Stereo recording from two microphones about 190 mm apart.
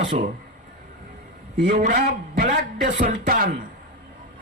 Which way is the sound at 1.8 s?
50° right (ahead or behind).